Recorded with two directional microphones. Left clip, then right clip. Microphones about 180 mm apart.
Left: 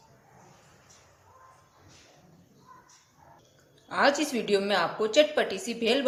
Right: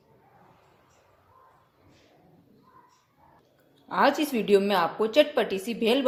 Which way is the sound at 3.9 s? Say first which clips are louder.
Right 1 dB; 25° right (ahead or behind).